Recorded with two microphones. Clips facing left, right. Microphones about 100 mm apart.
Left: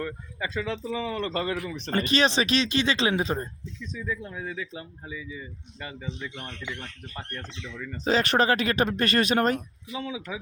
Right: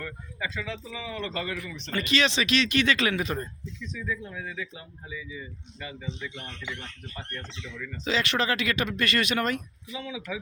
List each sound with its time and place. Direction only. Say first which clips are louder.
0.0 s speech: left 3 dB; 35° left (ahead or behind)
5.8 s speech: left 1 dB; 40° left (ahead or behind)
8.0 s speech: left 5 dB; 40° left (ahead or behind)